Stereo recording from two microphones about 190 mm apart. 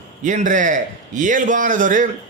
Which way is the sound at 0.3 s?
40° right (ahead or behind).